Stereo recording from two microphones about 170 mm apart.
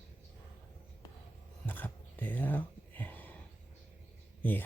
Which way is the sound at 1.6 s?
10° left (ahead or behind).